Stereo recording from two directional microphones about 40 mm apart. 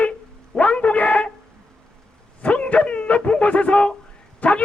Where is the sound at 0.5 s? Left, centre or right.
Left.